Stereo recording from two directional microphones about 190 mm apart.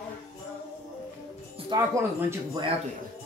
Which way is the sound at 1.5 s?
20° right (ahead or behind).